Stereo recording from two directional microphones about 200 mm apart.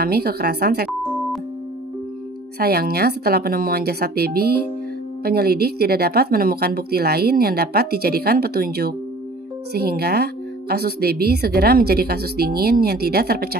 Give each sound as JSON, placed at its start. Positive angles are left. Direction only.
{"t": 0.0, "sound": "speech", "side_deg": -50}
{"t": 2.6, "sound": "speech", "side_deg": -50}